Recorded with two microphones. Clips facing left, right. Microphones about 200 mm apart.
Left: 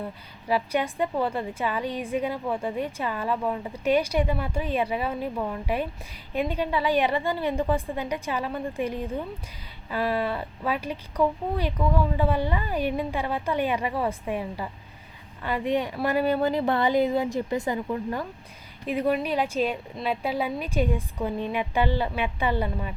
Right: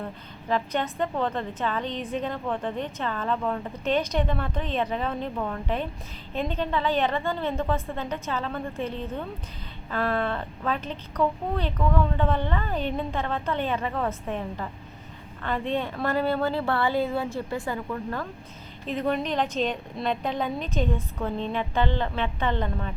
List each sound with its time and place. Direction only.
0.4 s a woman's voice: 10° left (ahead or behind)